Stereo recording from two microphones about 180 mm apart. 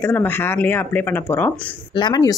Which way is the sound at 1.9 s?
25° left (ahead or behind).